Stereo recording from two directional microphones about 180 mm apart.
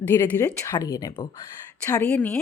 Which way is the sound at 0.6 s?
20° left (ahead or behind).